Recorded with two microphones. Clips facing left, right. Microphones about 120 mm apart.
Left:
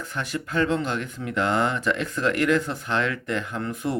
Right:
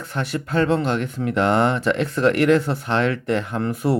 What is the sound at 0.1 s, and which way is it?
Speech, 40° right (ahead or behind).